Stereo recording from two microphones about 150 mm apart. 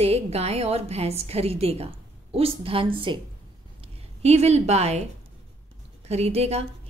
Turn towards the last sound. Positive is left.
turn(degrees=-45)  # may be behind; listen again after turning